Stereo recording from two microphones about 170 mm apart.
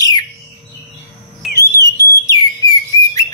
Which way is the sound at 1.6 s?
20° left (ahead or behind).